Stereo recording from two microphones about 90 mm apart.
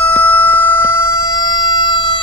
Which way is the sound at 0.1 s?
15° left (ahead or behind).